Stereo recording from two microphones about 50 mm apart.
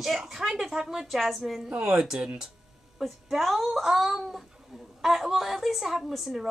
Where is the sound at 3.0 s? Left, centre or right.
Centre.